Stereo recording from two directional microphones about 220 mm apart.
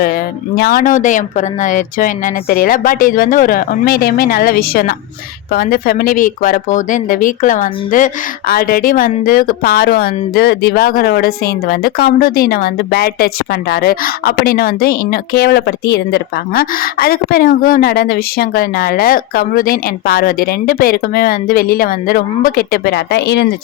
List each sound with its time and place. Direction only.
0.0 s speech: 45° left (ahead or behind)